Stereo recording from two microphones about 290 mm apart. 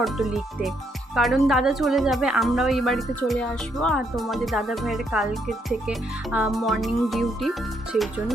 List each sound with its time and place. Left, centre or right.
0.0 s speech: centre